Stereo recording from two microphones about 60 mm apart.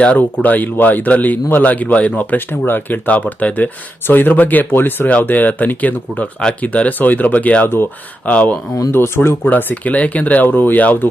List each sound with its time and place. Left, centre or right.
0.0 s speech: left
8.9 s speech: left
9.4 s speech: left